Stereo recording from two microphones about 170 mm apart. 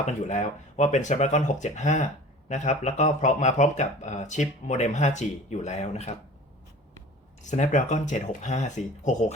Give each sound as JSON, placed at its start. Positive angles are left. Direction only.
{"t": 0.0, "sound": "speech", "side_deg": 45}
{"t": 7.4, "sound": "speech", "side_deg": 45}